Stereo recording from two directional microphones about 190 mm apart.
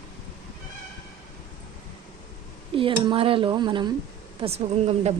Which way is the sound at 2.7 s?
25° right (ahead or behind).